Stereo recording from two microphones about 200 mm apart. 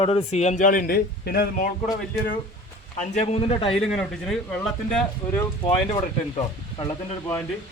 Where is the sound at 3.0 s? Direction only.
35° left (ahead or behind).